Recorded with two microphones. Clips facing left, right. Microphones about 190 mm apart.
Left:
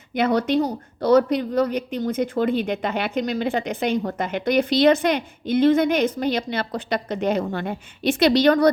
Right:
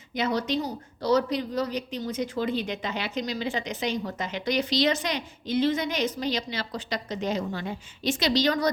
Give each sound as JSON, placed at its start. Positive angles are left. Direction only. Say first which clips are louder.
{"t": 0.1, "sound": "speech", "louder": "left 7 dB", "side_deg": 55}